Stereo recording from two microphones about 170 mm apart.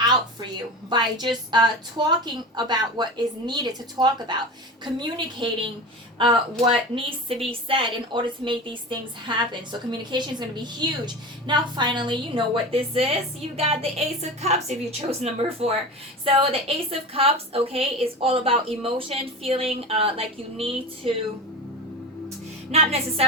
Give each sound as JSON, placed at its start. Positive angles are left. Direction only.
{"t": 0.1, "sound": "a woman's voice", "side_deg": -25}
{"t": 22.7, "sound": "a woman's voice", "side_deg": -35}